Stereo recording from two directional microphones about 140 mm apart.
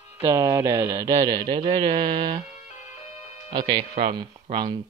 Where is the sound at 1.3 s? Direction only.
35° right (ahead or behind).